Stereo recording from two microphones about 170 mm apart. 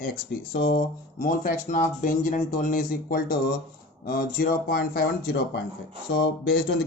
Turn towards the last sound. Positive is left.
turn(degrees=60)  # may be behind; listen again after turning